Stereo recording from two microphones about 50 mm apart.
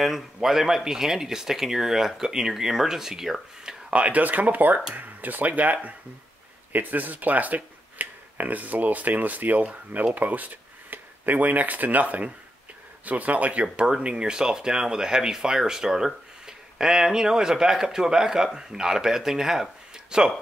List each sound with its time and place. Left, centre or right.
0.0 s speech: centre
3.9 s speech: right